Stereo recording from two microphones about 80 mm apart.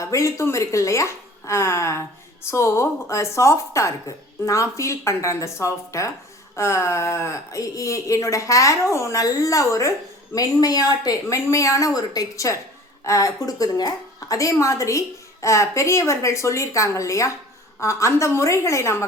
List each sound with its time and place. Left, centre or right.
0.0 s speech: left